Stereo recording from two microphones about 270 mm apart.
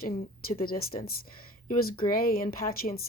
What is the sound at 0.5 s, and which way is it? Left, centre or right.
Speech, left.